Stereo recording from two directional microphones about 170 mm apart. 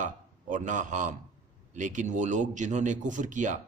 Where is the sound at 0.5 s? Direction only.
50° right (ahead or behind).